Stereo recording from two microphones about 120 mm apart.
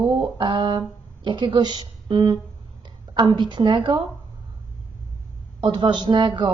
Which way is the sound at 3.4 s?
40° right (ahead or behind).